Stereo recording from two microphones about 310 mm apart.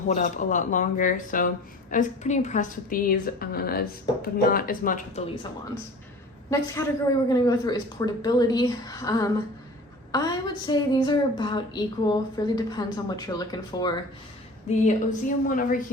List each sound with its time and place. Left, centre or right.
0.1 s a woman's voice: left
7.3 s a woman's voice: centre
14.7 s a woman's voice: left